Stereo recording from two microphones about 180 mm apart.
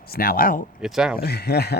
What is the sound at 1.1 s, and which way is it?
Speech, 60° left (ahead or behind).